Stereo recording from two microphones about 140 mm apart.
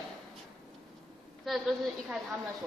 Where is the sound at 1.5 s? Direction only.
Centre (ahead or behind).